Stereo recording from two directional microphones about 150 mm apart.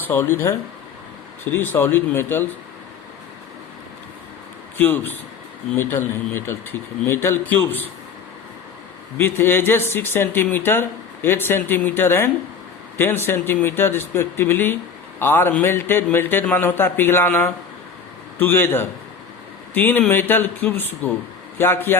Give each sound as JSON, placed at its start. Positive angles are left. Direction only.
{"t": 0.0, "sound": "speech", "side_deg": 15}
{"t": 1.5, "sound": "speech", "side_deg": 15}
{"t": 4.8, "sound": "speech", "side_deg": 15}
{"t": 9.1, "sound": "speech", "side_deg": 15}